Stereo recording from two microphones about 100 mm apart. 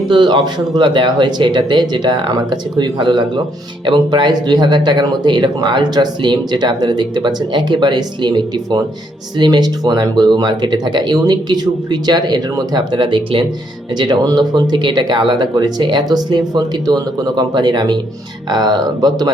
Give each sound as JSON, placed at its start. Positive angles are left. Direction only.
{"t": 0.1, "sound": "speech", "side_deg": -55}